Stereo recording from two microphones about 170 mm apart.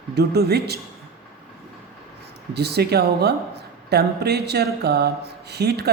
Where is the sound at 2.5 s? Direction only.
70° right (ahead or behind).